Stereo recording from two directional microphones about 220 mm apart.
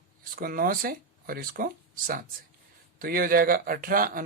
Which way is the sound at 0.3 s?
40° right (ahead or behind).